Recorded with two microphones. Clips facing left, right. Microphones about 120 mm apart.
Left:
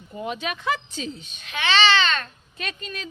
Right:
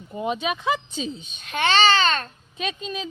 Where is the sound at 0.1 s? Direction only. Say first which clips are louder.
Right 4 dB; 20° right (ahead or behind).